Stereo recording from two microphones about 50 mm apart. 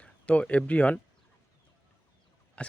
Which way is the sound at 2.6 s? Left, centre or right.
Left.